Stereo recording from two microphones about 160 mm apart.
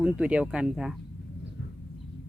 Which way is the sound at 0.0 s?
5° right (ahead or behind).